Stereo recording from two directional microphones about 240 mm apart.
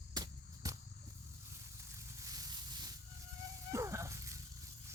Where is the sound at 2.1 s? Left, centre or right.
Centre.